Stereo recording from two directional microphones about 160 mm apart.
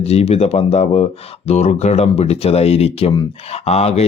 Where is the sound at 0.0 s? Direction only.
40° left (ahead or behind).